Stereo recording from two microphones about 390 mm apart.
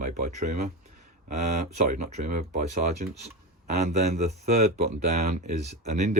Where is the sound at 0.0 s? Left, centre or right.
Centre.